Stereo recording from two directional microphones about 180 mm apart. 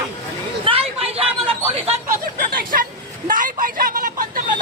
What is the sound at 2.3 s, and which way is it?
Hubbub, 50° right (ahead or behind).